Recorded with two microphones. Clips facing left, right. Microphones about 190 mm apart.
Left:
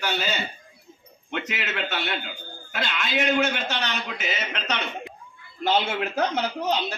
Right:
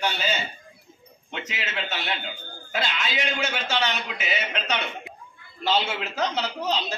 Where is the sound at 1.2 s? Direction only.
55° left (ahead or behind).